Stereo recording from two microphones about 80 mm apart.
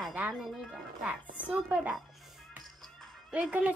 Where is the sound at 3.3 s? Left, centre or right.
Centre.